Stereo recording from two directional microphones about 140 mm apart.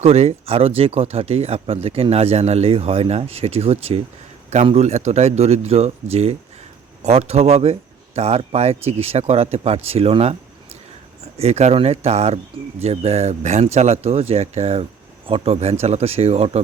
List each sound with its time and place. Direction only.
0.0 s speech: 50° right (ahead or behind)
11.3 s speech: 50° right (ahead or behind)